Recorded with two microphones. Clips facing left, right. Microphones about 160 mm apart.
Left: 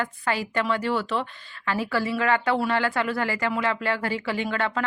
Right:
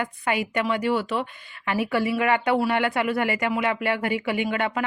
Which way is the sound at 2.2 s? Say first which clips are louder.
Even; 15° right (ahead or behind).